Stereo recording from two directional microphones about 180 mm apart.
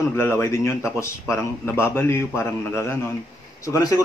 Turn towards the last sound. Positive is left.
turn(degrees=20)  # may be behind; listen again after turning